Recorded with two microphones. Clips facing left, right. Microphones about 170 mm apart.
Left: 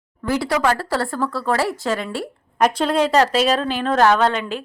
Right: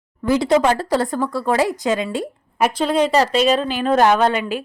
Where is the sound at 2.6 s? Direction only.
Centre (ahead or behind).